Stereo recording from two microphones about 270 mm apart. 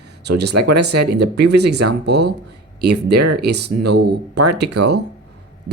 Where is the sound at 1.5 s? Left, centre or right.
Right.